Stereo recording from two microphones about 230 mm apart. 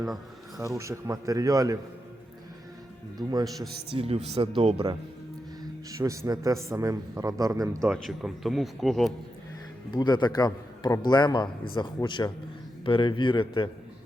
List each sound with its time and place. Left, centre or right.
0.5 s a man's voice: centre
3.2 s a man's voice: centre
5.9 s a man's voice: centre
7.9 s speech: centre
9.9 s a man's voice: centre